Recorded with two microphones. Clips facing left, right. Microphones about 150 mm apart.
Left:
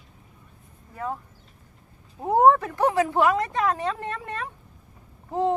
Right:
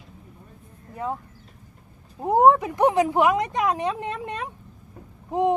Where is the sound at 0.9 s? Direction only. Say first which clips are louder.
Right 2 dB; 20° right (ahead or behind).